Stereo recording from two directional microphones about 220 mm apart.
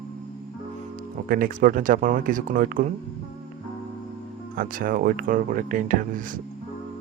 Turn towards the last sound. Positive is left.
turn(degrees=-40)  # may be behind; listen again after turning